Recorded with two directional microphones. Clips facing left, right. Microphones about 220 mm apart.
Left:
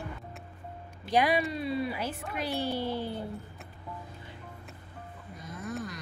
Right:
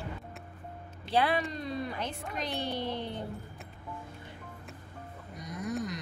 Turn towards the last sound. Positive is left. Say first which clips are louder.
# right 2 dB
turn(degrees=-20)  # may be behind; listen again after turning